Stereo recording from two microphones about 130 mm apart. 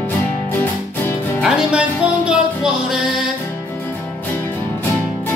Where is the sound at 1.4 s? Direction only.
10° right (ahead or behind).